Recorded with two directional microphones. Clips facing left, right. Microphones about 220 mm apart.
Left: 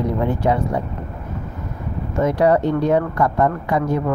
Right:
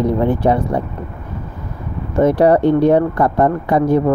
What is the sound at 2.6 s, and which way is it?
Speech, 65° right (ahead or behind).